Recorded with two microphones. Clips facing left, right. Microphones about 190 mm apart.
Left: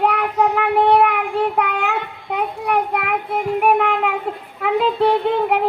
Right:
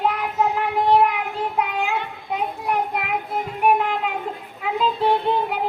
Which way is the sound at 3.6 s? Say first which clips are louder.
Left 1 dB; 70° left (ahead or behind).